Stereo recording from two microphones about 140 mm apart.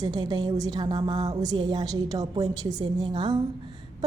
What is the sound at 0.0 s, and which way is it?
A woman's voice, 30° right (ahead or behind).